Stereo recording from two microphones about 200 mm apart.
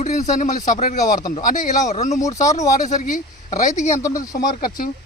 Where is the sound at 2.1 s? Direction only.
15° left (ahead or behind).